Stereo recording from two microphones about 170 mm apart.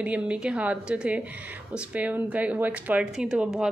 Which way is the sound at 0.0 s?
5° right (ahead or behind).